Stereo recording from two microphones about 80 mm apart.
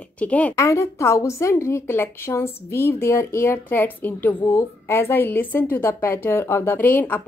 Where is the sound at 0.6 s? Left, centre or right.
Left.